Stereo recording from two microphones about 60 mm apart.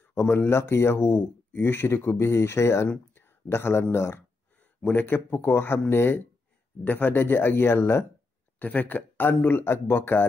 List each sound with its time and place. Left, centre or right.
0.1 s speech: left
3.2 s a sound: left
4.9 s speech: left
8.5 s speech: left